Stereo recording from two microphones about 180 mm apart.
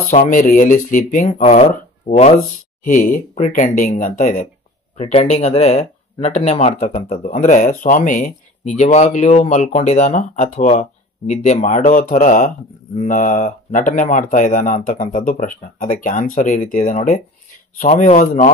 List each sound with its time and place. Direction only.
0.1 s speech: 45° left (ahead or behind)
7.0 s speech: 50° left (ahead or behind)